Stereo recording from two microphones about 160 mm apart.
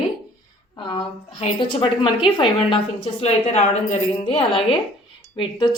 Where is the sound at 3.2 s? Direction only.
40° left (ahead or behind).